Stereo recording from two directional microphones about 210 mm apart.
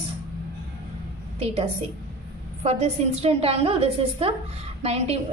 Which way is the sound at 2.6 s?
30° right (ahead or behind).